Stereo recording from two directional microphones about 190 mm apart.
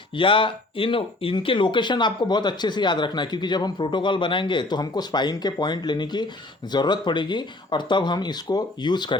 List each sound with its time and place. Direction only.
0.2 s speech: 25° left (ahead or behind)